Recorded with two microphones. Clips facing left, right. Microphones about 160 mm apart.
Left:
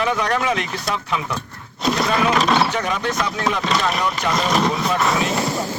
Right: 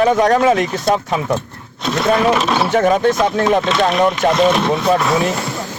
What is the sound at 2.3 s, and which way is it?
Speech, 5° right (ahead or behind).